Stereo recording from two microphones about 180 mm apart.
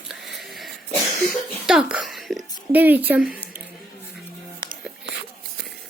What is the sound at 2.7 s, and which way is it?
Speech, 10° right (ahead or behind).